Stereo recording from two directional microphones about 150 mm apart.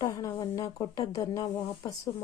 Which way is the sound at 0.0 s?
25° left (ahead or behind).